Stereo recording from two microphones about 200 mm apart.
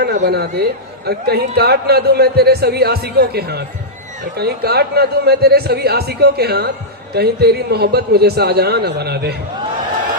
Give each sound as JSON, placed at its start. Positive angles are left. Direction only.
{"t": 0.0, "sound": "a man's voice", "side_deg": -55}